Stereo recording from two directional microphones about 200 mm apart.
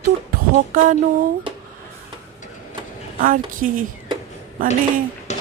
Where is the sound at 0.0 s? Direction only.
45° right (ahead or behind).